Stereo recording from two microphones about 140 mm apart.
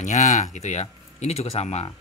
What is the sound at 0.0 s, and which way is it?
Speech, 60° left (ahead or behind).